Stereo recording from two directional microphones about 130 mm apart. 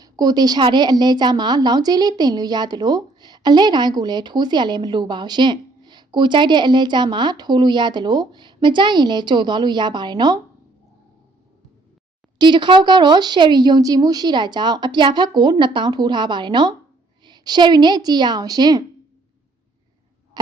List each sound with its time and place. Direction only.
0.0 s a woman's voice: 30° right (ahead or behind)
12.4 s a woman's voice: 35° right (ahead or behind)
20.4 s a sound: 30° right (ahead or behind)